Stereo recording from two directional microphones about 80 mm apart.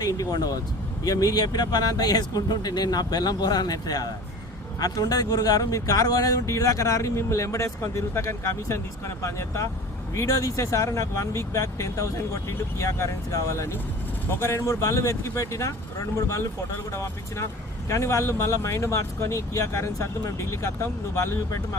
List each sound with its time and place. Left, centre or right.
0.2 s speech: left